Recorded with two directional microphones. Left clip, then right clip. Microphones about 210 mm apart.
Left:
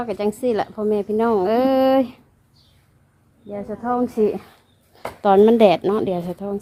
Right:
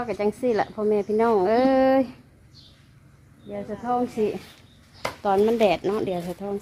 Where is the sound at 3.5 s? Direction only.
10° left (ahead or behind).